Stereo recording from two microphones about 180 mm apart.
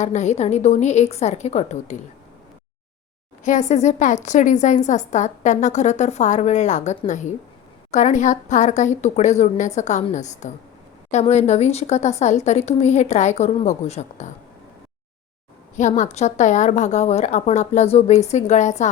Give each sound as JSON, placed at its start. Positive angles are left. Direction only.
{"t": 0.0, "sound": "a woman's voice", "side_deg": 40}
{"t": 3.4, "sound": "a woman's voice", "side_deg": 45}
{"t": 15.7, "sound": "a woman's voice", "side_deg": 40}